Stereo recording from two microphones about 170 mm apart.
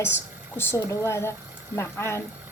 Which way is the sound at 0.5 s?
15° left (ahead or behind).